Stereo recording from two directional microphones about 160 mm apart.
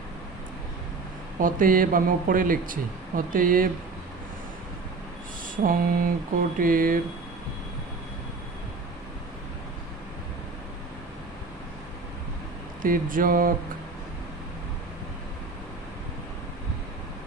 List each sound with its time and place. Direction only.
1.4 s speech: 60° right (ahead or behind)
5.6 s speech: 60° right (ahead or behind)
12.8 s speech: 60° right (ahead or behind)